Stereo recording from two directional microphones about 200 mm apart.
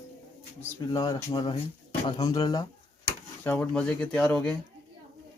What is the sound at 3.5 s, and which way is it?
Speech, 5° left (ahead or behind).